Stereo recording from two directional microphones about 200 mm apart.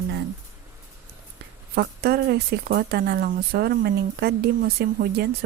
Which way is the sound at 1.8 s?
50° right (ahead or behind).